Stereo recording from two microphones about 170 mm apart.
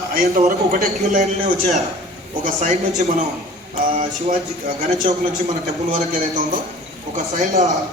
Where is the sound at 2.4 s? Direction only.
45° right (ahead or behind).